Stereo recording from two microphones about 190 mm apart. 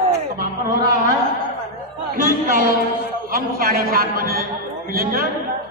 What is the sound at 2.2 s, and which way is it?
A man's voice, 50° right (ahead or behind).